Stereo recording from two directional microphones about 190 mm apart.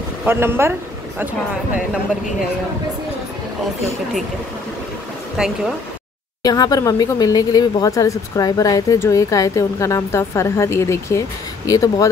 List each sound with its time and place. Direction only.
0.2 s speech: 10° right (ahead or behind)
5.4 s speech: 5° right (ahead or behind)
6.4 s speech: 20° left (ahead or behind)